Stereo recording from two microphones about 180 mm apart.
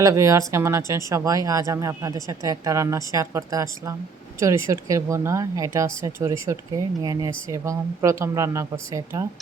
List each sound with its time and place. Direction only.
0.0 s speech: 15° right (ahead or behind)